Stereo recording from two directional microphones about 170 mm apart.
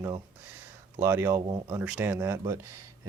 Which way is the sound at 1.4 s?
30° right (ahead or behind).